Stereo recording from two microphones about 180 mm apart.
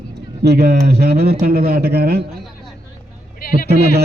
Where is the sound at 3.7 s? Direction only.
65° right (ahead or behind).